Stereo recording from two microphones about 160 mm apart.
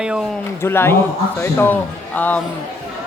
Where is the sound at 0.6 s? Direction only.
15° left (ahead or behind).